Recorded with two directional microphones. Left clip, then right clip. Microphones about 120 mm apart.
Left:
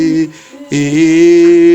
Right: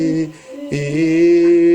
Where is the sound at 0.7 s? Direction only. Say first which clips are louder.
Left 7 dB; 45° left (ahead or behind).